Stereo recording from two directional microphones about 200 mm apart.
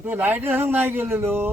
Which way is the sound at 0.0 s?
10° right (ahead or behind).